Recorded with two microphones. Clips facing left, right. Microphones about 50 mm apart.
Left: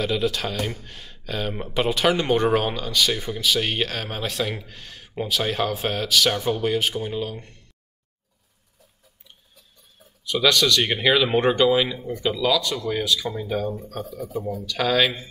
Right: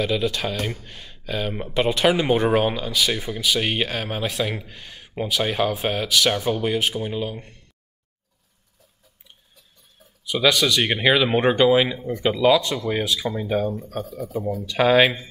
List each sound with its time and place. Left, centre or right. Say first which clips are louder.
0.0 s speech: right 1 dB; centre
10.2 s speech: even; centre
14.6 s speech: right 5 dB; right